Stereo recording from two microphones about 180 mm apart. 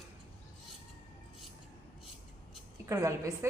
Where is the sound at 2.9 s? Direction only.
20° right (ahead or behind).